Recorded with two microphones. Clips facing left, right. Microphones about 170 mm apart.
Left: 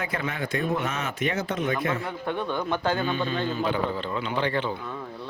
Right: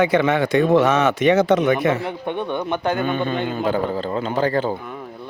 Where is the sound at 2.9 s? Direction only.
55° right (ahead or behind); by 4.7 s 40° right (ahead or behind).